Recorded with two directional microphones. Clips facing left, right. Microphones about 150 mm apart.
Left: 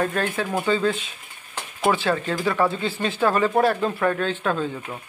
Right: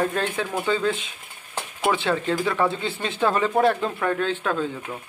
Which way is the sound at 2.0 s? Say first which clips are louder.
Even; centre (ahead or behind).